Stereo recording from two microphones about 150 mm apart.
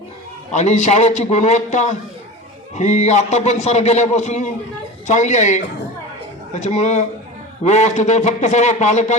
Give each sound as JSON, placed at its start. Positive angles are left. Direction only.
{"t": 0.5, "sound": "a man's voice", "side_deg": 50}